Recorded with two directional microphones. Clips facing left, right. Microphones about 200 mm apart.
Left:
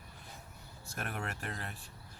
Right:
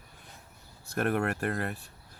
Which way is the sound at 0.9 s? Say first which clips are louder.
Right 12 dB; 60° right (ahead or behind).